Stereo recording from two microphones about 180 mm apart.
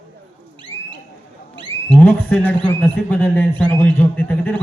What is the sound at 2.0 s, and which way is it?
A man's voice, 10° left (ahead or behind).